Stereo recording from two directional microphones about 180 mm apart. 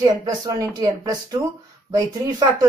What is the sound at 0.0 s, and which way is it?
A woman's voice, 20° right (ahead or behind).